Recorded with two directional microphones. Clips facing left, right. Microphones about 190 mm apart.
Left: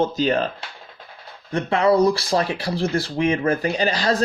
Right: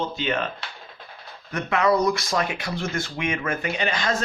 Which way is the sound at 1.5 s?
30° left (ahead or behind).